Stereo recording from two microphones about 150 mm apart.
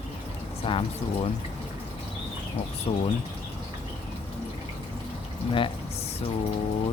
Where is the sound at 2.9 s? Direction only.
40° left (ahead or behind).